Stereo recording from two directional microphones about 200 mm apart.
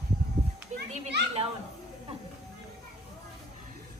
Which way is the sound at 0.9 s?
35° right (ahead or behind).